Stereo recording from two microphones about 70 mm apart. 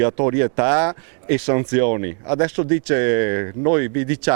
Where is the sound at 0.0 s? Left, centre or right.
Right.